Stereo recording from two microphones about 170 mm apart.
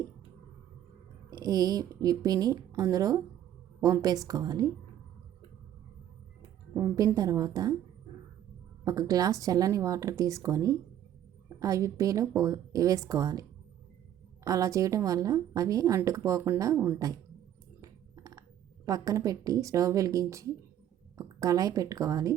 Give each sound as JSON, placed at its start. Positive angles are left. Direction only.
{"t": 1.3, "sound": "a woman's voice", "side_deg": -20}
{"t": 6.7, "sound": "a woman's voice", "side_deg": -20}
{"t": 8.8, "sound": "a woman's voice", "side_deg": -20}
{"t": 14.4, "sound": "a woman's voice", "side_deg": -20}
{"t": 17.7, "sound": "a sound", "side_deg": -20}
{"t": 18.9, "sound": "a woman's voice", "side_deg": -20}